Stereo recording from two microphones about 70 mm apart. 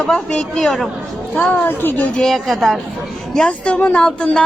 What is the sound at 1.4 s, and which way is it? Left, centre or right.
Speech, centre.